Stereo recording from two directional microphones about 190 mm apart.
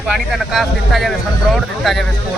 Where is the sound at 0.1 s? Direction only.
Centre (ahead or behind).